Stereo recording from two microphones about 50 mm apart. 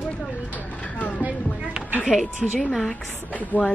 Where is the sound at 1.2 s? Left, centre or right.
Centre.